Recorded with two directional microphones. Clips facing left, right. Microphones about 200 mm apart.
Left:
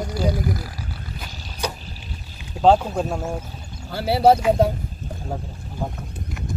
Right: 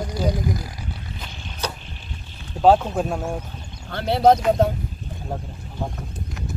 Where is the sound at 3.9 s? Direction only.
5° left (ahead or behind).